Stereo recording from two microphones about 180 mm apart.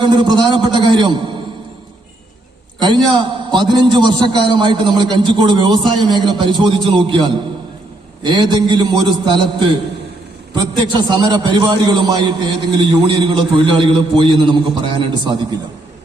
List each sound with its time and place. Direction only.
0.0 s a man's voice: 25° right (ahead or behind)
2.7 s a man's voice: 25° right (ahead or behind)
8.2 s a man's voice: 25° right (ahead or behind)